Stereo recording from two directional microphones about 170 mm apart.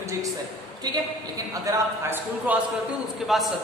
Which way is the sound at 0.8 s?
25° right (ahead or behind).